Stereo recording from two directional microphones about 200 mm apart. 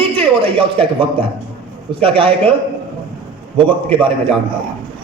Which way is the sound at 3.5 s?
25° right (ahead or behind).